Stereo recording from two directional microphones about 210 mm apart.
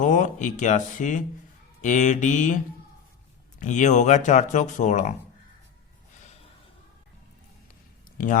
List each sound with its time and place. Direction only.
0.0 s speech: 35° left (ahead or behind)
3.6 s speech: 35° left (ahead or behind)